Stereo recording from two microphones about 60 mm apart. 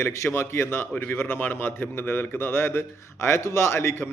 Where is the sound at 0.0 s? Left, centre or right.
Left.